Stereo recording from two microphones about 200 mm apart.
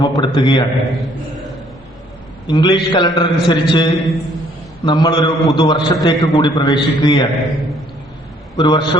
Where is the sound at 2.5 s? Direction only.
20° left (ahead or behind).